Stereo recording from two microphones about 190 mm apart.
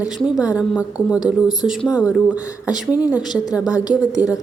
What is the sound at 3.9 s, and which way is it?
Speech, 5° right (ahead or behind).